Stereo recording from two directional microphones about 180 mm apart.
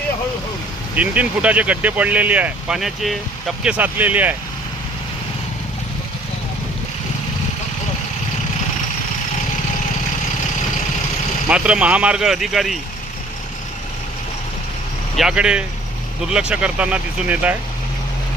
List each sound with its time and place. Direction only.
0.9 s speech: 10° right (ahead or behind)
11.4 s speech: 5° right (ahead or behind)
15.2 s speech: 5° right (ahead or behind)